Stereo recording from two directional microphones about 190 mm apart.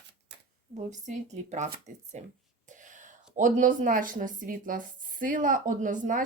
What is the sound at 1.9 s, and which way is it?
Speech, 40° right (ahead or behind).